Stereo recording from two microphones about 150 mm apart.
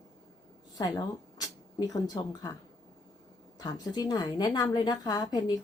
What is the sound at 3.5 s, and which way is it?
A woman's voice, 25° left (ahead or behind).